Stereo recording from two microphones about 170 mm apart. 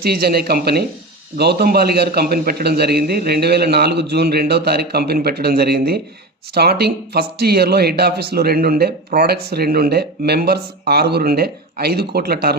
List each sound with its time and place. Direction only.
0.0 s speech: 65° right (ahead or behind)